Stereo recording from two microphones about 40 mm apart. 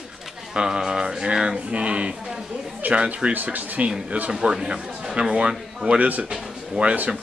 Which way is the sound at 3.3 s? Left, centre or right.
Right.